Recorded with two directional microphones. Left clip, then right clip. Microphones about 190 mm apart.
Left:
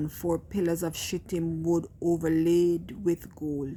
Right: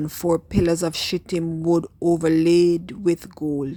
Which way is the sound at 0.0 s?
35° right (ahead or behind).